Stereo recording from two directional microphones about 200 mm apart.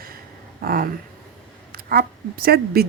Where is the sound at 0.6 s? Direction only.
45° right (ahead or behind).